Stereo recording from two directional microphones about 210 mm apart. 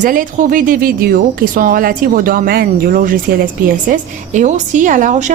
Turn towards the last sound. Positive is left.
turn(degrees=-35)  # may be behind; listen again after turning